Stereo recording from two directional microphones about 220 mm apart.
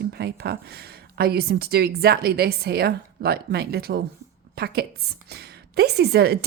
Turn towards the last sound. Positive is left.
turn(degrees=-45)  # may be behind; listen again after turning